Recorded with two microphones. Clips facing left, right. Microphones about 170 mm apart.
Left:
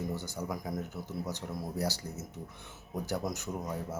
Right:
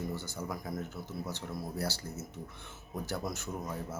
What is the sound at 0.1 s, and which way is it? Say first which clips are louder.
Speech: left 2 dB; 15° left (ahead or behind).